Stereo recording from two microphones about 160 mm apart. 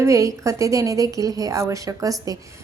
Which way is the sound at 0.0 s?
20° right (ahead or behind).